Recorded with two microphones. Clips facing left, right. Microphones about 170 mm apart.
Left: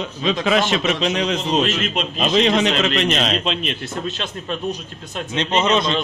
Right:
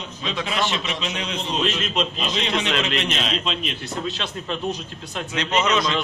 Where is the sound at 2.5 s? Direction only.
40° left (ahead or behind).